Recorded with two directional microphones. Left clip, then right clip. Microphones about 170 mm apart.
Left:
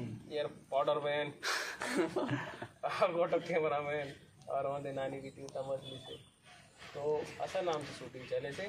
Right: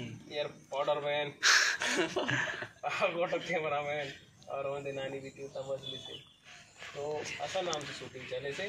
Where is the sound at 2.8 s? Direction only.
20° left (ahead or behind).